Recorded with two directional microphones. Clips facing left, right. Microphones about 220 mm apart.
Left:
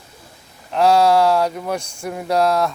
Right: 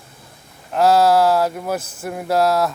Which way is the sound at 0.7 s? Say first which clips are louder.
Even; centre (ahead or behind).